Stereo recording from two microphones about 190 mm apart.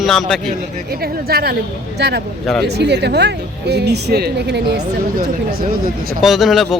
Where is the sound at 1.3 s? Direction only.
55° right (ahead or behind).